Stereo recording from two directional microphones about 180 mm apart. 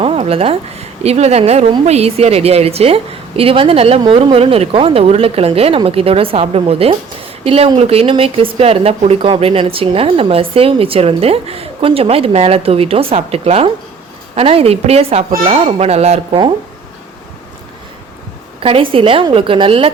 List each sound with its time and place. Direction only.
0.0 s speech: 30° right (ahead or behind)
18.6 s a woman's voice: 30° right (ahead or behind)